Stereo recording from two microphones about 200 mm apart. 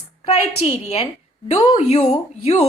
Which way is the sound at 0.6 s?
30° left (ahead or behind).